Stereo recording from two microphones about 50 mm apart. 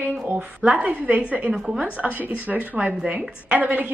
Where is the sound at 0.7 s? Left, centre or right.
Right.